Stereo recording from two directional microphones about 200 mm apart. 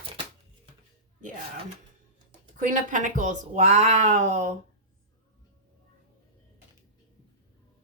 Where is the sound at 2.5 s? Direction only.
40° right (ahead or behind).